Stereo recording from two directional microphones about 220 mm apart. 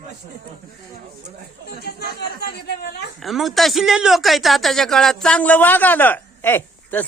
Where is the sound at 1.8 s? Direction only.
45° left (ahead or behind).